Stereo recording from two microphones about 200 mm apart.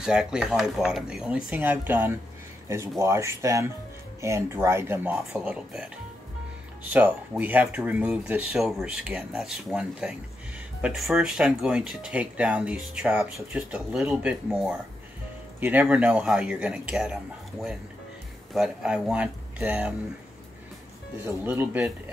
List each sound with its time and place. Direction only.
0.0 s speech: 5° right (ahead or behind)
21.5 s speech: 10° right (ahead or behind)